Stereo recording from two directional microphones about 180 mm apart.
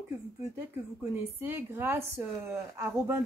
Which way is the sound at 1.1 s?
10° right (ahead or behind).